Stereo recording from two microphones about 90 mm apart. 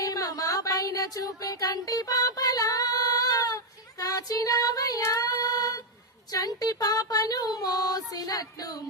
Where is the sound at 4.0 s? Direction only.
40° left (ahead or behind).